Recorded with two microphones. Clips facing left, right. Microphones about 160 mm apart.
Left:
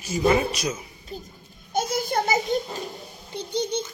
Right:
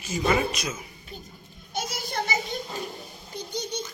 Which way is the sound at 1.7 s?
50° left (ahead or behind).